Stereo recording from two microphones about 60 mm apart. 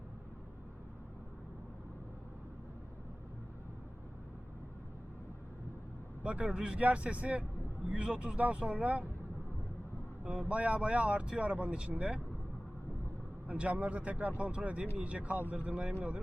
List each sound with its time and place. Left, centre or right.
6.2 s speech: centre
10.5 s speech: right
13.5 s speech: right